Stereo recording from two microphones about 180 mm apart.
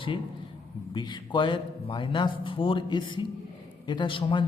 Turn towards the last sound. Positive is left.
turn(degrees=25)  # may be behind; listen again after turning